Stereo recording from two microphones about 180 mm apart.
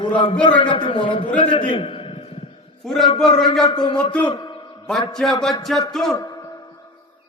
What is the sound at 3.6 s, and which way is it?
Speech, 25° left (ahead or behind).